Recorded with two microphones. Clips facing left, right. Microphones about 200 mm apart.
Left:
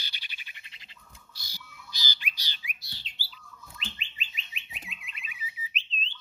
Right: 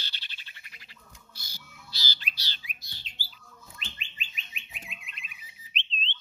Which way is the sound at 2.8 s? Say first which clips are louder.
Left 1 dB; 45° right (ahead or behind).